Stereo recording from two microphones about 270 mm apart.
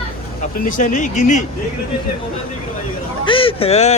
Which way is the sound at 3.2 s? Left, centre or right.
Centre.